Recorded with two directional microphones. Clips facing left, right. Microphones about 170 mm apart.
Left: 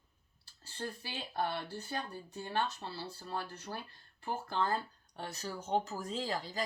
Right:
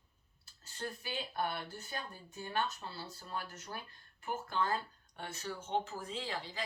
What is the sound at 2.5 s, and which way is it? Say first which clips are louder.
Speech: left 2 dB; 35° left (ahead or behind).